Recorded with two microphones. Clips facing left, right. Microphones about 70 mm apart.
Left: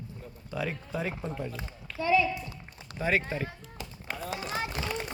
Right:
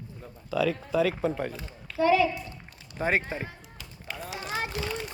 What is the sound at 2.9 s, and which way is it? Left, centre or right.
Speech, right.